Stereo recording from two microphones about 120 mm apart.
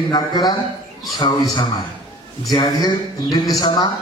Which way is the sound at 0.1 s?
35° left (ahead or behind).